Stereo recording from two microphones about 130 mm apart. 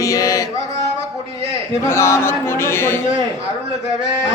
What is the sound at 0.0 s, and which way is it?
Mantra, 25° left (ahead or behind).